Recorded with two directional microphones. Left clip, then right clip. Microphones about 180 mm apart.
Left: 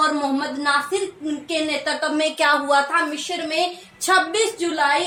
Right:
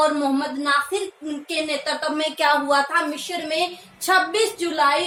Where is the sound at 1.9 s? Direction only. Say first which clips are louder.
Left 2 dB; 15° left (ahead or behind).